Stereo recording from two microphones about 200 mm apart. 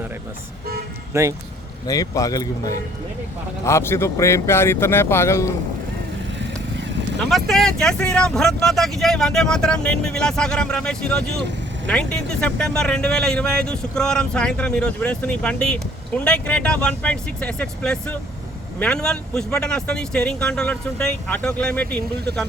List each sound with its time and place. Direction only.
1.1 s speech: 15° right (ahead or behind)
1.9 s speech: 15° left (ahead or behind)
7.3 s speech: centre (ahead or behind)